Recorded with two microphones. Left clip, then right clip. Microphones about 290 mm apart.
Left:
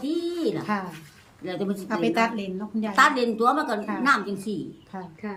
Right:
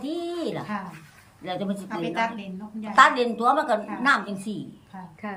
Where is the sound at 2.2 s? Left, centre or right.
Centre.